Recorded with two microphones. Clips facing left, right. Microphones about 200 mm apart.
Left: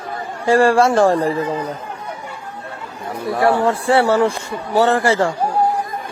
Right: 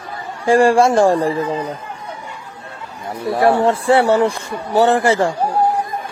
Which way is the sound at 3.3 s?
25° right (ahead or behind).